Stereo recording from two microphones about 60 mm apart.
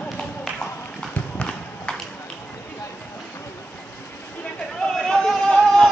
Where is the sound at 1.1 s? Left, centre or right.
Left.